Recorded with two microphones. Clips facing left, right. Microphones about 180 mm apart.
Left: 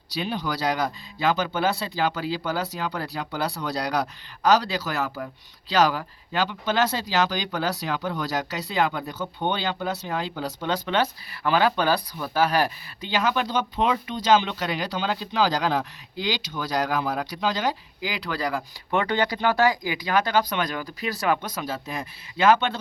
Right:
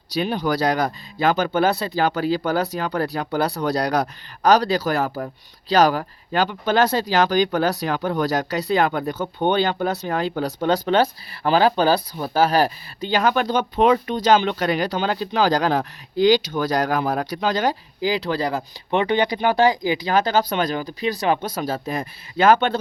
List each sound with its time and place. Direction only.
0.1 s speech: 45° right (ahead or behind)
10.8 s speech: 30° right (ahead or behind); by 17.7 s 50° right (ahead or behind)
18.0 s speech: 30° right (ahead or behind)